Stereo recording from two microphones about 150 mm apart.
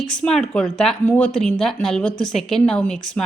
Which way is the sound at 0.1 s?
5° left (ahead or behind).